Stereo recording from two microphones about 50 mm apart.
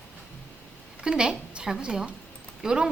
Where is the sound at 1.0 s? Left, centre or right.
Centre.